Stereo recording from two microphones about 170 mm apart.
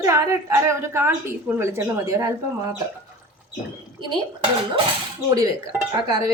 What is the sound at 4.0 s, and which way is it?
Speech, 30° right (ahead or behind).